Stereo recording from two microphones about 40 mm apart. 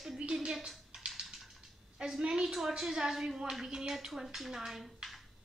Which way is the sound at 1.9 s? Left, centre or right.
Centre.